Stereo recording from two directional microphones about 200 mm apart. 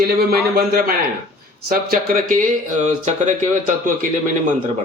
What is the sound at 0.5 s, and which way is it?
A man's voice, 50° right (ahead or behind).